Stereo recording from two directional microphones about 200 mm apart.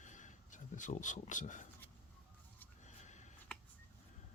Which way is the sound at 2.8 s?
35° left (ahead or behind).